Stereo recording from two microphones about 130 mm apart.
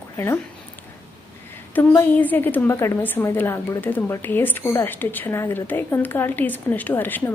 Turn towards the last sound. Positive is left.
turn(degrees=15)  # may be behind; listen again after turning